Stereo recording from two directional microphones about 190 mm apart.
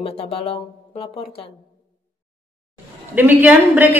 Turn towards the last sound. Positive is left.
turn(degrees=-10)  # may be behind; listen again after turning